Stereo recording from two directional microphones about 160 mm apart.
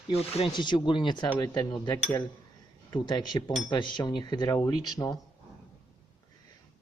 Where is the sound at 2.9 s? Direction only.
25° left (ahead or behind).